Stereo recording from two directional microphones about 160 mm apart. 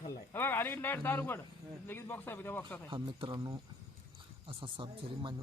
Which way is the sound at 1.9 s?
15° left (ahead or behind).